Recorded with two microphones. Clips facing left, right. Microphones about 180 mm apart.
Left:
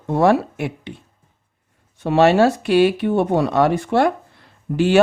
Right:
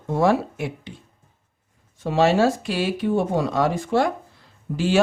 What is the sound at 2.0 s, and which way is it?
Speech, 65° left (ahead or behind).